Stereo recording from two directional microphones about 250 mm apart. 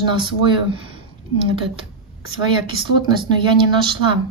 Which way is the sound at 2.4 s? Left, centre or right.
Centre.